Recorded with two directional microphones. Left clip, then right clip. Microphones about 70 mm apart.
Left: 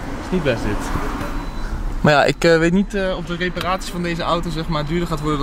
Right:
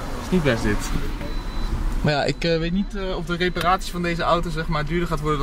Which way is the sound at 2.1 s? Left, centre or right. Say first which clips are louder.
Left 8 dB; left.